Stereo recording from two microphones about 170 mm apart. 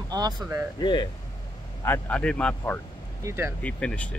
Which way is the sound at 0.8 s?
25° left (ahead or behind).